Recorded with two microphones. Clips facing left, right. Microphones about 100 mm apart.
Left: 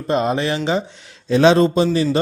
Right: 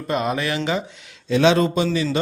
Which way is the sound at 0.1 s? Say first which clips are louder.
Left 4 dB; 30° left (ahead or behind).